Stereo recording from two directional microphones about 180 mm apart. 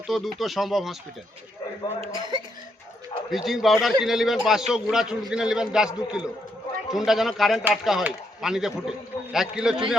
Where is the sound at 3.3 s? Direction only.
Centre (ahead or behind).